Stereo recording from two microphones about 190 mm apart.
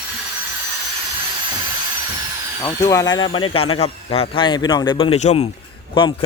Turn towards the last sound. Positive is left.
turn(degrees=25)  # may be behind; listen again after turning